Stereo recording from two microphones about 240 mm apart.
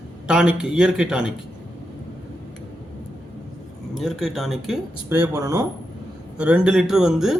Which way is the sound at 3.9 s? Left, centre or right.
Centre.